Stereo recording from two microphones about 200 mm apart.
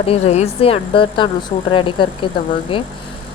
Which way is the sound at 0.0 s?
30° left (ahead or behind).